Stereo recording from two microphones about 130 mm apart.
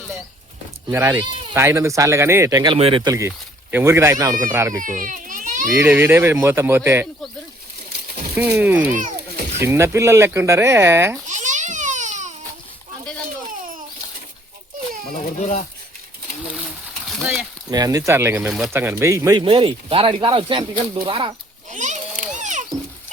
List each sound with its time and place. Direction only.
0.9 s speech: 20° right (ahead or behind)
2.7 s speech: 50° right (ahead or behind)
3.0 s speech: 25° right (ahead or behind)
4.8 s baby cry: 90° right
5.8 s speech: 15° right (ahead or behind)
8.4 s speech: 15° right (ahead or behind)
11.3 s babbling: 70° right (ahead or behind)
13.5 s a sound: 90° right
15.1 s speech: 65° left (ahead or behind)
17.7 s speech: 30° right (ahead or behind)
18.4 s speech: 5° right (ahead or behind)
18.7 s speech: 15° right (ahead or behind)
19.4 s speech: 40° right (ahead or behind)
21.7 s a sound: 70° right (ahead or behind)